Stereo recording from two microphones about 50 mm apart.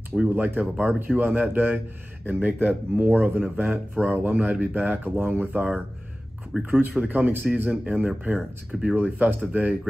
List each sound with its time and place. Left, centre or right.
0.3 s speech: right
3.3 s speech: right
3.6 s speech: right